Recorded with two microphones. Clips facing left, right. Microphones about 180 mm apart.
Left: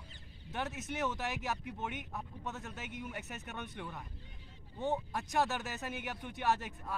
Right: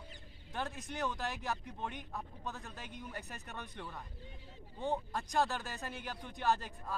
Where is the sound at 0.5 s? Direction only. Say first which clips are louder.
Left 2 dB; 5° left (ahead or behind).